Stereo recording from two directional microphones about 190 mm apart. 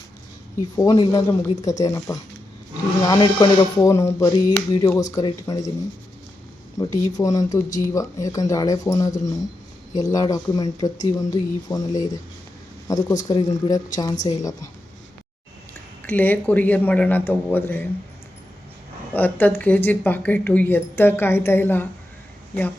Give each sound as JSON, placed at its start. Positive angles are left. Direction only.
{"t": 0.8, "sound": "speech", "side_deg": 20}
{"t": 6.7, "sound": "speech", "side_deg": 15}
{"t": 16.0, "sound": "speech", "side_deg": 10}
{"t": 19.1, "sound": "speech", "side_deg": 10}